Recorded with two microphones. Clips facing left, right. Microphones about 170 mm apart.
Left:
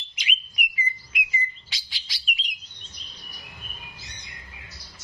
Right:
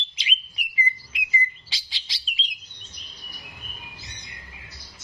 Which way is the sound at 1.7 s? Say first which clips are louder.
Right 1 dB; 30° right (ahead or behind).